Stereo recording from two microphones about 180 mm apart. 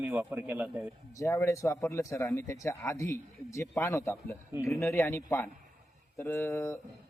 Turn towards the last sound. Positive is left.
turn(degrees=15)  # may be behind; listen again after turning